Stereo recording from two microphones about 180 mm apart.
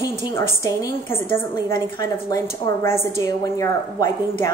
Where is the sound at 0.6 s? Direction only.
20° left (ahead or behind).